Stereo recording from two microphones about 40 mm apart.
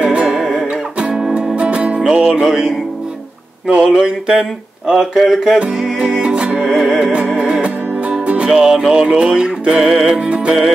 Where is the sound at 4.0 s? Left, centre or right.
Centre.